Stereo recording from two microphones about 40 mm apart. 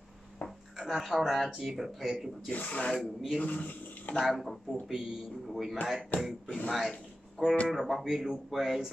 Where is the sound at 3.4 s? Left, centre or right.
Left.